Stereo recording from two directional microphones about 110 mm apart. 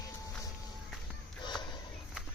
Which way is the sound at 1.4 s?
40° left (ahead or behind).